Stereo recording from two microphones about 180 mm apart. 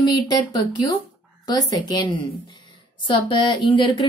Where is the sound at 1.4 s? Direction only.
25° left (ahead or behind).